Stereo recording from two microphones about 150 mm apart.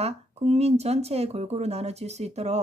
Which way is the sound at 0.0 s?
45° right (ahead or behind).